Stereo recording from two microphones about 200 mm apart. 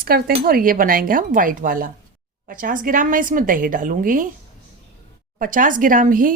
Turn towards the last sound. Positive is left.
turn(degrees=-45)  # may be behind; listen again after turning